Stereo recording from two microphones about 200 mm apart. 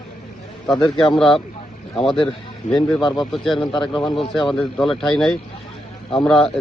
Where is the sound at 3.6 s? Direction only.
25° left (ahead or behind).